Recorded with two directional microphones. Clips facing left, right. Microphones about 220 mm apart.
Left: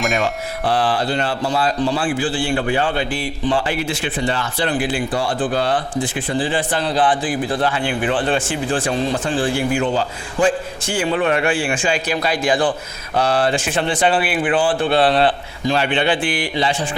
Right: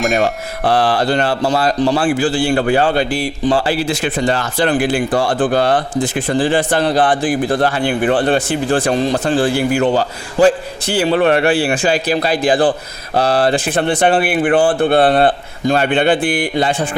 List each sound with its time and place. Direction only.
0.9 s speech: 75° right (ahead or behind)
2.0 s speech: 45° right (ahead or behind)
5.2 s speech: 70° right (ahead or behind)
5.5 s speech: 45° right (ahead or behind)
6.7 s speech: 65° right (ahead or behind)
7.1 s speech: 45° right (ahead or behind)
8.0 s speech: 60° right (ahead or behind)
8.3 s speech: 40° right (ahead or behind)
9.7 s speech: 65° right (ahead or behind)
10.3 s speech: 35° right (ahead or behind)
11.1 s speech: 60° right (ahead or behind)
11.3 s speech: 35° right (ahead or behind)
13.7 s speech: 55° right (ahead or behind)